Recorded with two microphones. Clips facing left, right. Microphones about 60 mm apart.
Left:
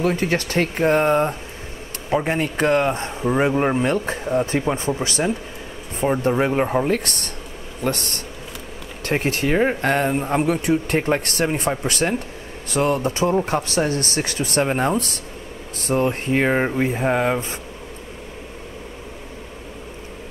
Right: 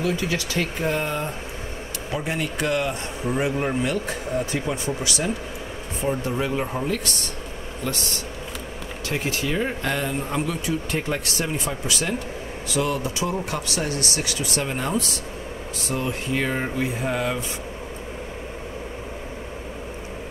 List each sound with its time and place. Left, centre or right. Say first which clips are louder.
0.0 s speech: left 4 dB; left